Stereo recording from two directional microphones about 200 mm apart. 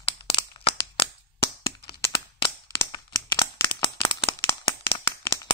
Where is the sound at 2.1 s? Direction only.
25° left (ahead or behind).